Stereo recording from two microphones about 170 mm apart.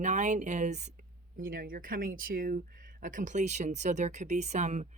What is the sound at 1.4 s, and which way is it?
Speech, 55° right (ahead or behind).